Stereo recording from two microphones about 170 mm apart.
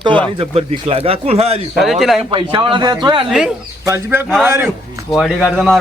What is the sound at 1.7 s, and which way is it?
Speech, centre (ahead or behind).